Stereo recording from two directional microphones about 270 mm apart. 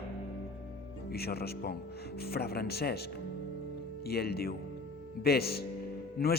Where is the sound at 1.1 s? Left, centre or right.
Left.